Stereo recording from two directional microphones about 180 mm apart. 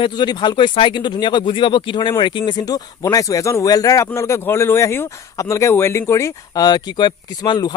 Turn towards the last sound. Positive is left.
turn(degrees=25)  # may be behind; listen again after turning